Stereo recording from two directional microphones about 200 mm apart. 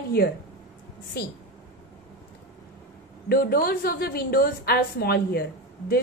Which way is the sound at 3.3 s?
50° left (ahead or behind).